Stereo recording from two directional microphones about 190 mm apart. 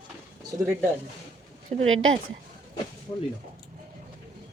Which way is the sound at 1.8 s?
90° right.